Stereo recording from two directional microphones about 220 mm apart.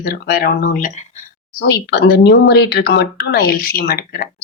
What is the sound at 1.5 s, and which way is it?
Speech, 50° left (ahead or behind).